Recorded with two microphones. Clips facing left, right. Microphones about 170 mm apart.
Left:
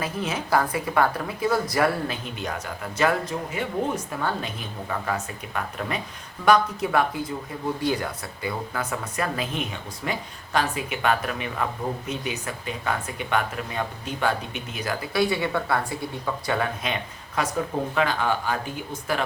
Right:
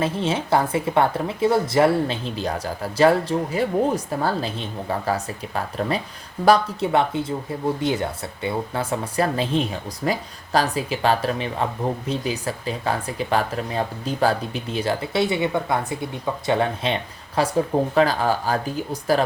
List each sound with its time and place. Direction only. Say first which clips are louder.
0.0 s speech: right 6 dB; 30° right (ahead or behind)